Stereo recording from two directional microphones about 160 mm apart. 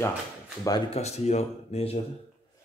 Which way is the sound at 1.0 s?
40° left (ahead or behind).